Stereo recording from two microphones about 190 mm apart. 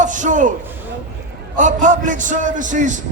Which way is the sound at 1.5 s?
40° right (ahead or behind).